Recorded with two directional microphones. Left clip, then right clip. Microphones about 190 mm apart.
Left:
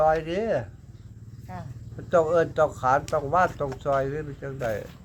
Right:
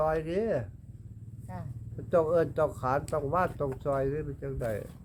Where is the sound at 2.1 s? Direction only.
25° right (ahead or behind).